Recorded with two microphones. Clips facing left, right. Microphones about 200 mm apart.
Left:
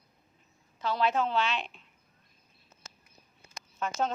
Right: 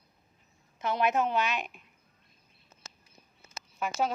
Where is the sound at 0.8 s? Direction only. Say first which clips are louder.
Right 1 dB; 20° right (ahead or behind).